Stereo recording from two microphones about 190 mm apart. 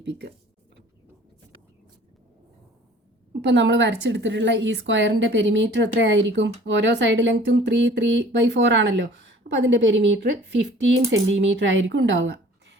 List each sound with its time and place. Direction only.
0.0 s speech: 60° right (ahead or behind)
3.4 s a woman's voice: 65° right (ahead or behind)